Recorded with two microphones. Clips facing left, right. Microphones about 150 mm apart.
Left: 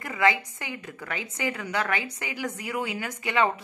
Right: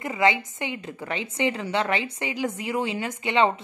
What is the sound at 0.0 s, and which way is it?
A woman's voice, 20° right (ahead or behind).